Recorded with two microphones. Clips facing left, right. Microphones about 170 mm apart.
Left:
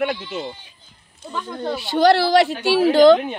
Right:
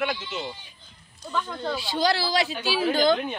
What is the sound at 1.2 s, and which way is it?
Speech, 20° left (ahead or behind).